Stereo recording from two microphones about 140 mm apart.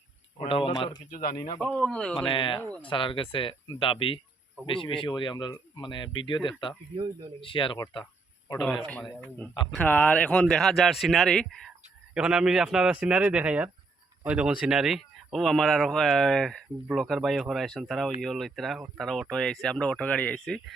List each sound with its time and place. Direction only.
0.3 s speech: 40° left (ahead or behind)
1.1 s speech: 90° left
1.6 s a man's voice: 10° left (ahead or behind)
2.1 s speech: 35° left (ahead or behind)
6.9 s speech: 40° right (ahead or behind)
7.4 s speech: 35° left (ahead or behind)
8.5 s a man's voice: 5° left (ahead or behind)